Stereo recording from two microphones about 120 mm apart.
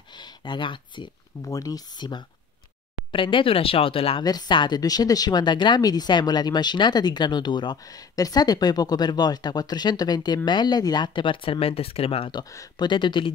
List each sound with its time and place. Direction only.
0.2 s speech: 40° left (ahead or behind)
1.4 s speech: 30° left (ahead or behind); by 4.2 s 50° left (ahead or behind)
4.2 s speech: 35° left (ahead or behind); by 12.3 s 55° left (ahead or behind)
12.3 s speech: 35° left (ahead or behind)